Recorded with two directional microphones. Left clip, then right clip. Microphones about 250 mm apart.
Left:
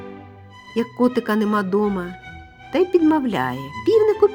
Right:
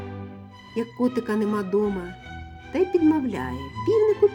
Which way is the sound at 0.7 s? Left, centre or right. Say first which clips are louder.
Left 6 dB; left.